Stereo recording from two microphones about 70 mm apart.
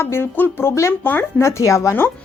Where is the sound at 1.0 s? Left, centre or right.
Left.